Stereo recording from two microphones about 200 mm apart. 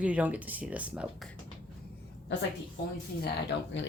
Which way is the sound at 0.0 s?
5° right (ahead or behind).